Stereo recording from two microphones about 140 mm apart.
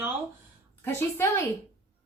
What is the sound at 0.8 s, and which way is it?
Speech, 15° left (ahead or behind).